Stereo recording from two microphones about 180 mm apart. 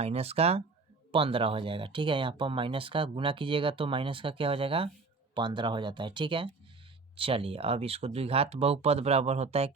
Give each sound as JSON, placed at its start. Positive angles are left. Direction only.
{"t": 0.0, "sound": "speech", "side_deg": -35}